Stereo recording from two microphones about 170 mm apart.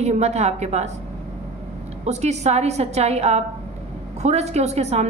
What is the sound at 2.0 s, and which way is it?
A woman's voice, 40° right (ahead or behind).